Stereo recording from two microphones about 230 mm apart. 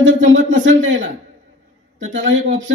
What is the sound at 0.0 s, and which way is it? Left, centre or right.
A man's voice, right.